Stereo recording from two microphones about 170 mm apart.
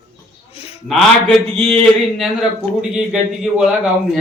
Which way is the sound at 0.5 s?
35° left (ahead or behind).